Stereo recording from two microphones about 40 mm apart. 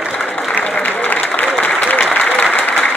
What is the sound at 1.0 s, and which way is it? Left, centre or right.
Applause, left.